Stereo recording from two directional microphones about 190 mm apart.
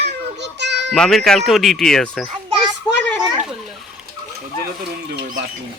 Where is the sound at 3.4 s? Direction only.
Centre (ahead or behind).